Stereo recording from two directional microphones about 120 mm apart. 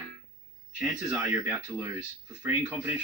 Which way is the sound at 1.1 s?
25° right (ahead or behind).